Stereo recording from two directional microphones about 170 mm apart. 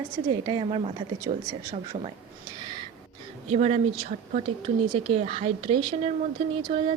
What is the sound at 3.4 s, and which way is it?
A woman's voice, 40° right (ahead or behind).